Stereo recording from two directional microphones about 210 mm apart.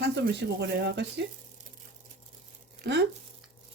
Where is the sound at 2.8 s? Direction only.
50° right (ahead or behind).